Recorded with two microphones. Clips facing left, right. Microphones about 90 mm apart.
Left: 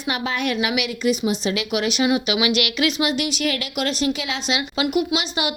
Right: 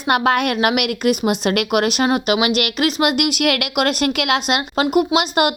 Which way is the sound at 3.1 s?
55° right (ahead or behind).